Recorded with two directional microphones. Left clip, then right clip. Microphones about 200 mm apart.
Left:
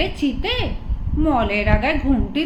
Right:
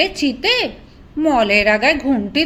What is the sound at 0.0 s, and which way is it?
A woman's voice, 35° right (ahead or behind).